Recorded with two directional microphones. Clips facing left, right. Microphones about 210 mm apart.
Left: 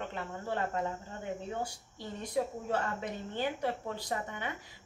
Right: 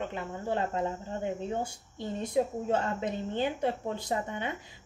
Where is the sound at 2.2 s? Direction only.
25° right (ahead or behind).